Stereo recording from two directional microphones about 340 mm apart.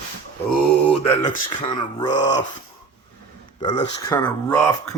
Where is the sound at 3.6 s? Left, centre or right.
Centre.